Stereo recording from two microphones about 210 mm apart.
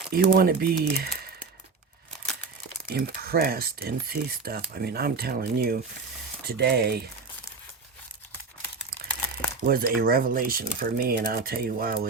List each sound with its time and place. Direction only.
0.1 s speech: 45° right (ahead or behind)
2.8 s speech: 45° right (ahead or behind)
9.6 s speech: 45° right (ahead or behind)